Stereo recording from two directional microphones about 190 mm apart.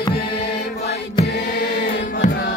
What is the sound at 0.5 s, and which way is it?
Music, 55° left (ahead or behind).